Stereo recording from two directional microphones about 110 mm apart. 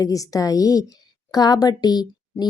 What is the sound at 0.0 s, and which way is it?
Speech, 30° left (ahead or behind).